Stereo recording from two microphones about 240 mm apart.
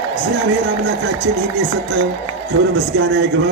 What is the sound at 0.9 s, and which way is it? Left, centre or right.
Speech, right.